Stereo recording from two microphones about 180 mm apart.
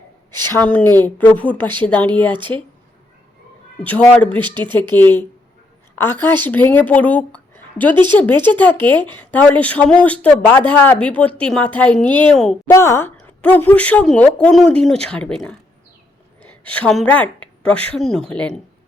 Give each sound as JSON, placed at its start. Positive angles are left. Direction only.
{"t": 0.4, "sound": "speech", "side_deg": 10}
{"t": 3.8, "sound": "speech", "side_deg": 10}
{"t": 4.3, "sound": "speech", "side_deg": -25}
{"t": 4.9, "sound": "speech", "side_deg": 10}
{"t": 7.5, "sound": "a sound", "side_deg": 10}
{"t": 8.2, "sound": "speech", "side_deg": 10}
{"t": 12.7, "sound": "speech", "side_deg": 15}